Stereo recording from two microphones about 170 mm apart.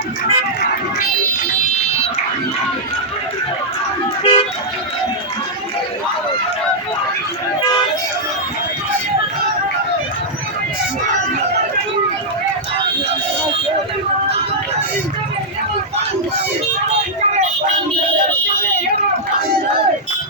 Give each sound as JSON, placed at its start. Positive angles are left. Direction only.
{"t": 1.7, "sound": "fire alarm", "side_deg": 40}
{"t": 4.2, "sound": "vehicle", "side_deg": 35}